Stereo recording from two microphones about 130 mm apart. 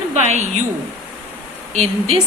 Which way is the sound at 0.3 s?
60° right (ahead or behind).